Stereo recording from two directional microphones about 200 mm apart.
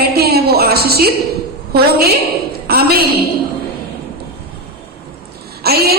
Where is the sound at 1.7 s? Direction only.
50° right (ahead or behind).